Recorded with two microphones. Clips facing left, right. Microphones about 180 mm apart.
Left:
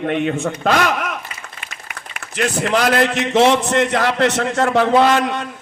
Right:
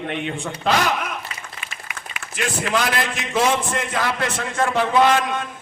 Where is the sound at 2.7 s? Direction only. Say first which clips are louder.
Left 7 dB; 70° left (ahead or behind).